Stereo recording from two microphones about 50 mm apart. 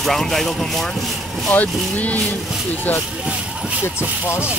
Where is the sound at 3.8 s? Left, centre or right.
Left.